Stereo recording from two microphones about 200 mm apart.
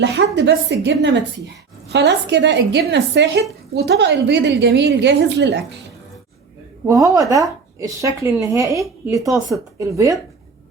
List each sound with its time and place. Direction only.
0.0 s a woman's voice: 60° right (ahead or behind)
6.8 s speech: 15° right (ahead or behind)